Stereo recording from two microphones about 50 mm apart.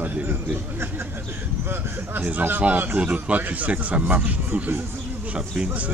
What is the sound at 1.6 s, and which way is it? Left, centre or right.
Speech, right.